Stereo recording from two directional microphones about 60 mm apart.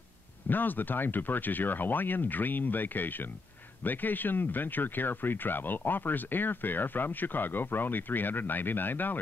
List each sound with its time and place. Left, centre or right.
0.5 s speech: left